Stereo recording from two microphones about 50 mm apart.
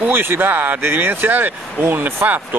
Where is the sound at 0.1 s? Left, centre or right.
Right.